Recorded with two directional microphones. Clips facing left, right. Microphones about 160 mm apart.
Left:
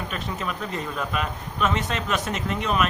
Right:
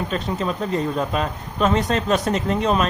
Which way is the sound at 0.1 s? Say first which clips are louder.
Right 6 dB; 30° right (ahead or behind).